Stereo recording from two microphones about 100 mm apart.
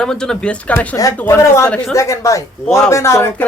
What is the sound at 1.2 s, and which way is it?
Speech, 20° left (ahead or behind).